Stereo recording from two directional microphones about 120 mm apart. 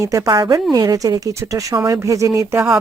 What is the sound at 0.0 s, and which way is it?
A woman's voice, 25° right (ahead or behind).